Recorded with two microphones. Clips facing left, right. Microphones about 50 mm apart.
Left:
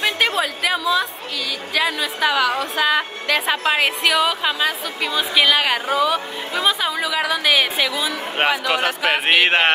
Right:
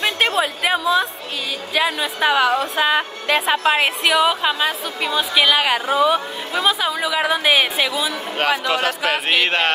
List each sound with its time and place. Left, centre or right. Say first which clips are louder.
0.4 s chatter: right 2 dB; right
1.7 s a woman's voice: right 1 dB; right
2.9 s a woman's voice: right 1 dB; right
5.3 s a woman's voice: even; centre
5.9 s a woman's voice: right 2 dB; right
6.6 s speech: right 1 dB; centre
7.2 s a woman's voice: right 2 dB; right
8.4 s a man's voice: even; left